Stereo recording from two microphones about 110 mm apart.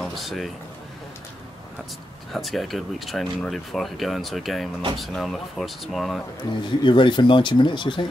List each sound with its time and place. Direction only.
0.0 s speech: centre (ahead or behind)
2.3 s speech: centre (ahead or behind)
6.4 s speech: 40° left (ahead or behind)